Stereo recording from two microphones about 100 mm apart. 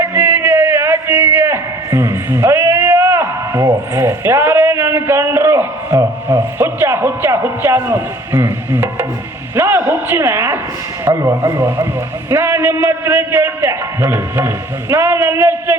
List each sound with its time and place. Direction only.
0.0 s a man's voice: 20° right (ahead or behind)